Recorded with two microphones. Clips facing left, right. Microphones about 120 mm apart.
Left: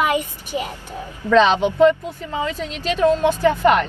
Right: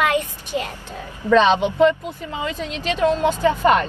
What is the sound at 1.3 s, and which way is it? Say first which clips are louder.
Speech: even; 15° right (ahead or behind).